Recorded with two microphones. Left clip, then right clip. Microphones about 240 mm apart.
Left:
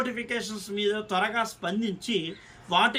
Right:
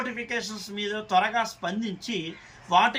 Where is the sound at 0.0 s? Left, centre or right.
Centre.